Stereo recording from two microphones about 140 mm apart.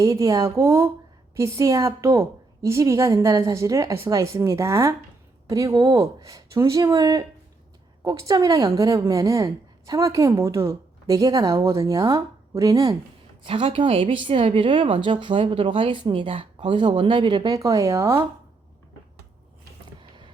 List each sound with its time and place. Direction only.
0.0 s a woman's voice: 25° right (ahead or behind)
13.4 s a woman's voice: 40° right (ahead or behind); by 18.3 s 20° right (ahead or behind)
20.0 s a sound: 35° right (ahead or behind)